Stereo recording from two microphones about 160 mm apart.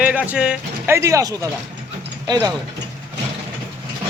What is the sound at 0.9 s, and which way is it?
Speech, 20° right (ahead or behind).